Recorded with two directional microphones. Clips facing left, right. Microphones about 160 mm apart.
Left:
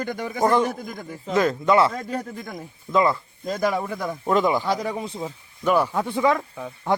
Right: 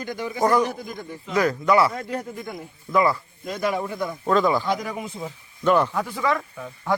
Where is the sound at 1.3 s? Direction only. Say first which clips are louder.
Left 1 dB; 25° left (ahead or behind).